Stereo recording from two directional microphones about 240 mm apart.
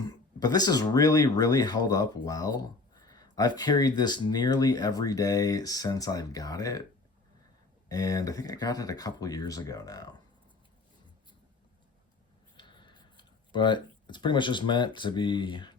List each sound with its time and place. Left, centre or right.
0.0 s speech: centre
7.9 s speech: centre
12.5 s a sound: centre